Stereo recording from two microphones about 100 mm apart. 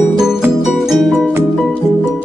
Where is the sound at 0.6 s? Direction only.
5° right (ahead or behind).